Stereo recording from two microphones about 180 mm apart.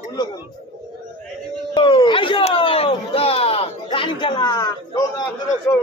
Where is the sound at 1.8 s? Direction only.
25° left (ahead or behind).